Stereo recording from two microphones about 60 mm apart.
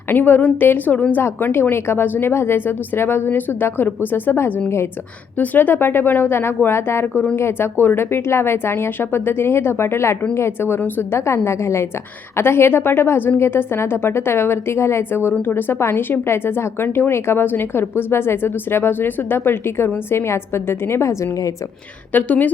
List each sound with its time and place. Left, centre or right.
0.1 s a woman's voice: left
1.7 s a woman's voice: left
10.8 s a woman's voice: left
11.3 s a woman's voice: left
22.1 s a woman's voice: left